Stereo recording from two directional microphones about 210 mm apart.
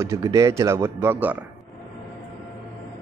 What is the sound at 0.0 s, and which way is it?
A man's voice, 15° right (ahead or behind).